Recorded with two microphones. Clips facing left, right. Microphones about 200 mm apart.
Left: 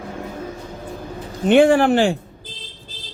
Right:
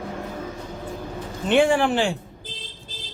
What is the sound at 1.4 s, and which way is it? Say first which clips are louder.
Speech: left 6 dB; 55° left (ahead or behind).